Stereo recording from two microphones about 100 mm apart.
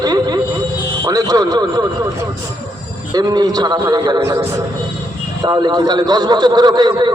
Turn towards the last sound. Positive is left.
turn(degrees=-45)  # may be behind; listen again after turning